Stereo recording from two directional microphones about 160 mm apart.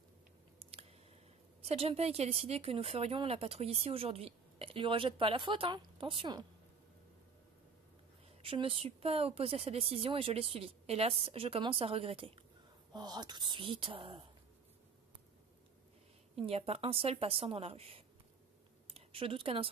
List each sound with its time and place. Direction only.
0.6 s chewing: 35° right (ahead or behind)
1.6 s speech: 40° right (ahead or behind)
8.4 s speech: 35° right (ahead or behind)
16.3 s a woman's voice: 40° right (ahead or behind)